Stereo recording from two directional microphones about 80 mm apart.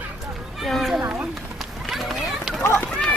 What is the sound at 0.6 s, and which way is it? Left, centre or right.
Speech, centre.